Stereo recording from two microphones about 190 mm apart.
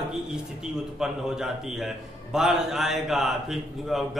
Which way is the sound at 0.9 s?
5° right (ahead or behind).